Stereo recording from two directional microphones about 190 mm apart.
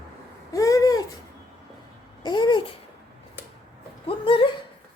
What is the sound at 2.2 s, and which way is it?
Babbling, 25° left (ahead or behind).